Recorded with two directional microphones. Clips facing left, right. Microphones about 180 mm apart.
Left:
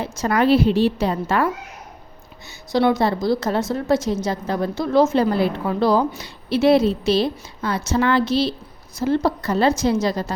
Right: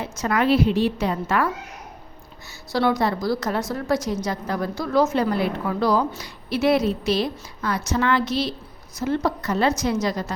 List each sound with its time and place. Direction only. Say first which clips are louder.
0.0 s a woman's voice: left 3 dB; 35° left (ahead or behind)
2.7 s a woman's voice: left 3 dB; 20° left (ahead or behind)